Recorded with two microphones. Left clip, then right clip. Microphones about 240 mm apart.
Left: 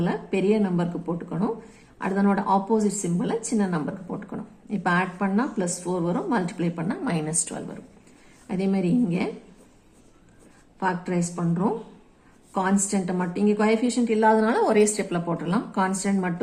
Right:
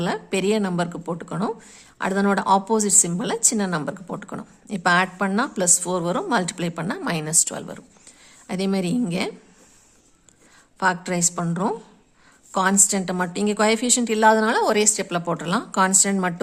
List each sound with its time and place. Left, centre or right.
0.0 s speech: right
10.8 s speech: right